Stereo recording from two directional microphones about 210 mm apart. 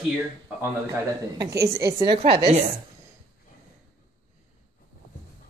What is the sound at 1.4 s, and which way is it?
Speech, 15° right (ahead or behind).